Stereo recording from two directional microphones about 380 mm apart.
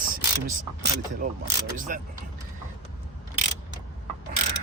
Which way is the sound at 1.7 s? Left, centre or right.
Right.